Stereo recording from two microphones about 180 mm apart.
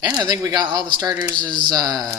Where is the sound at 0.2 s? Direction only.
20° right (ahead or behind).